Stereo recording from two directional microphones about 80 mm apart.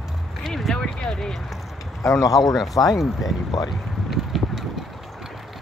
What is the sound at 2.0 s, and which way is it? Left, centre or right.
Speech, left.